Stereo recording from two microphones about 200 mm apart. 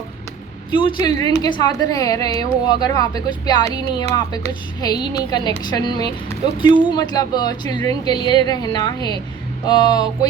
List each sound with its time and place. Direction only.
0.7 s a woman's voice: 25° left (ahead or behind)